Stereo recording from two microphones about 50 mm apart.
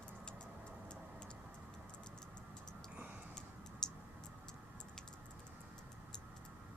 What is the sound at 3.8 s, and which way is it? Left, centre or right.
Tick-tock, centre.